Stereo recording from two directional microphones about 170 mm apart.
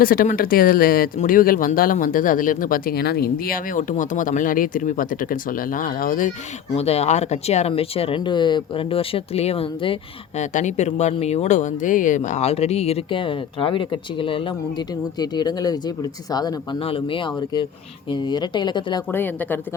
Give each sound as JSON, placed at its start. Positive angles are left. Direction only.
{"t": 0.0, "sound": "speech", "side_deg": 55}
{"t": 6.7, "sound": "speech", "side_deg": 40}
{"t": 19.1, "sound": "a woman's voice", "side_deg": 10}